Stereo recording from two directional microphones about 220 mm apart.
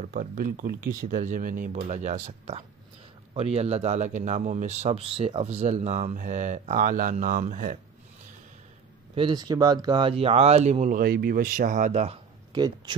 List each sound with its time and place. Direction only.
0.0 s a man's voice: 40° right (ahead or behind)
9.1 s speech: 20° right (ahead or behind)
12.5 s speech: 20° right (ahead or behind)